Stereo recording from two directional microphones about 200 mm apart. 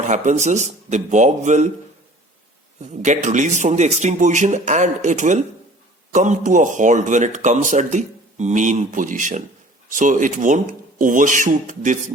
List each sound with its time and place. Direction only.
0.0 s speech: 35° right (ahead or behind)
3.0 s speech: 35° right (ahead or behind)